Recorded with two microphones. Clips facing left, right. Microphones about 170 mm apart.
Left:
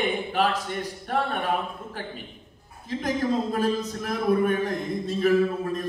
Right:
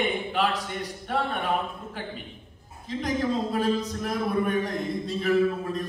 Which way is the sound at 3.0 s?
45° left (ahead or behind).